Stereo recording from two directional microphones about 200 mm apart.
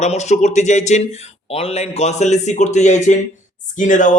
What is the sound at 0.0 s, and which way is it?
Speech, 35° left (ahead or behind).